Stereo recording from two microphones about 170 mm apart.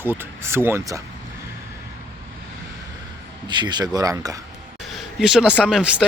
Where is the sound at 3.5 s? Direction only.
25° right (ahead or behind).